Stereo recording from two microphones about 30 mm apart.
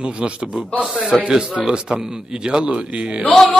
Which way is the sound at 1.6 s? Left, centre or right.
Right.